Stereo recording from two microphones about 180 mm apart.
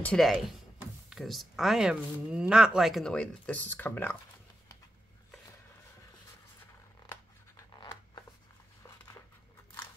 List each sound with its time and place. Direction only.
0.0 s speech: 5° left (ahead or behind)
7.1 s scissors: 15° left (ahead or behind)